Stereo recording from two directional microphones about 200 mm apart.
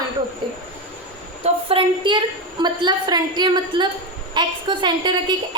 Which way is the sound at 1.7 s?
25° right (ahead or behind).